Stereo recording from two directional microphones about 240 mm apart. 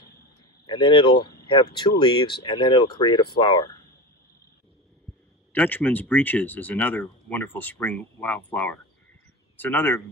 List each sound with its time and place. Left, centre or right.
0.7 s speech: left
5.5 s speech: centre